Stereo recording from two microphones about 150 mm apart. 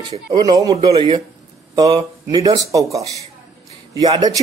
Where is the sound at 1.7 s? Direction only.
25° right (ahead or behind).